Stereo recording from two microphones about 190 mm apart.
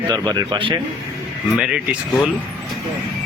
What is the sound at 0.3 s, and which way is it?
Speech, 20° right (ahead or behind).